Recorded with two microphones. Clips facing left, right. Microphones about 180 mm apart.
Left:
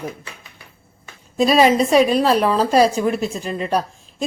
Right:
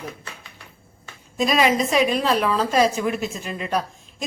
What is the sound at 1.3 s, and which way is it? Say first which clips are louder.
A woman's voice: left 5 dB; 35° left (ahead or behind).